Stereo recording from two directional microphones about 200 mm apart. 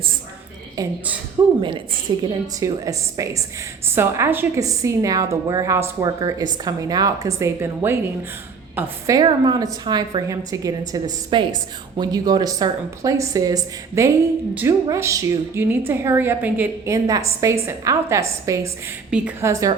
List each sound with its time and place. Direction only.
0.8 s a woman's voice: 20° right (ahead or behind)
2.1 s a woman's voice: 25° right (ahead or behind)